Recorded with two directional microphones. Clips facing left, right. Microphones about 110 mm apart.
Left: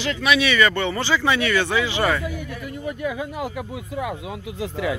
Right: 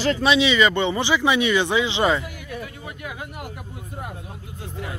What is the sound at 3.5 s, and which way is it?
Speech, 90° left.